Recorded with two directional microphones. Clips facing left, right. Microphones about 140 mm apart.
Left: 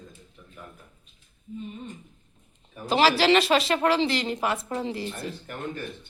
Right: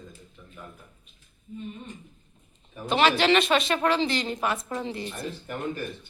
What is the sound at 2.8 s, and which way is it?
A woman's voice, 30° left (ahead or behind).